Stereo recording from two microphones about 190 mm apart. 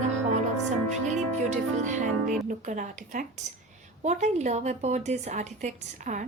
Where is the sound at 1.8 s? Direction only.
40° right (ahead or behind).